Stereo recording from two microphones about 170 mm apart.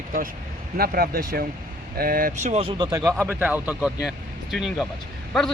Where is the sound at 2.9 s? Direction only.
20° right (ahead or behind).